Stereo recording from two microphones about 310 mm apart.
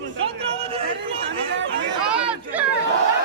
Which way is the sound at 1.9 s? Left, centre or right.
Centre.